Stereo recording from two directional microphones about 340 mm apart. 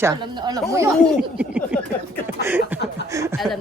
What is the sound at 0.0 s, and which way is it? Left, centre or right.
A man's voice, centre.